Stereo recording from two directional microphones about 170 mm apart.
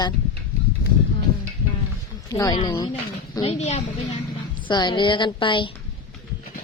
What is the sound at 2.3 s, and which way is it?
Speech, 20° left (ahead or behind).